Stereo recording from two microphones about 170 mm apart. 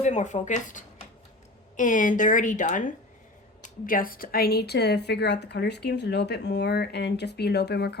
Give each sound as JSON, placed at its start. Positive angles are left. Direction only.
{"t": 0.0, "sound": "speech", "side_deg": 45}